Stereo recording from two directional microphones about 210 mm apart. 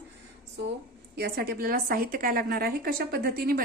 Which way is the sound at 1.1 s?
50° right (ahead or behind).